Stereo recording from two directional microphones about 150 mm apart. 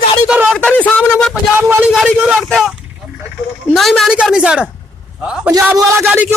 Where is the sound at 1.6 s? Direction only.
10° right (ahead or behind).